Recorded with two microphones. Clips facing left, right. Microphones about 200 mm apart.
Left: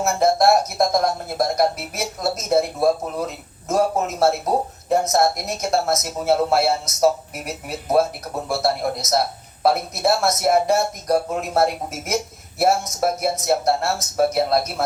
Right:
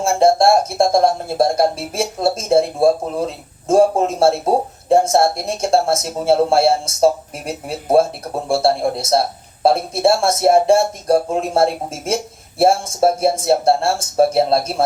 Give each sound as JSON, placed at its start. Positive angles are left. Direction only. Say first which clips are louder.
{"t": 0.0, "sound": "speech", "louder": "right 4 dB", "side_deg": -30}